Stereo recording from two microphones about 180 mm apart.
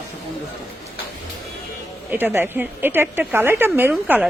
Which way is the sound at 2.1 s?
10° right (ahead or behind).